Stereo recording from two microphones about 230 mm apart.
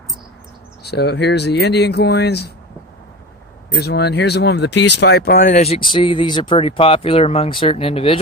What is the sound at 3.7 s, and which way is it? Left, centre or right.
Speech, left.